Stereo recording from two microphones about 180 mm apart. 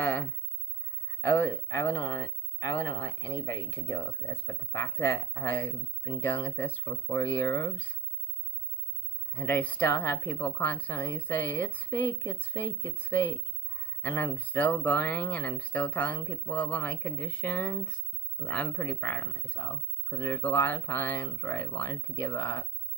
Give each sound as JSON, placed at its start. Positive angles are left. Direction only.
{"t": 0.0, "sound": "a sound", "side_deg": 10}
{"t": 1.2, "sound": "speech", "side_deg": 10}
{"t": 3.7, "sound": "speech", "side_deg": 10}
{"t": 9.3, "sound": "speech", "side_deg": 10}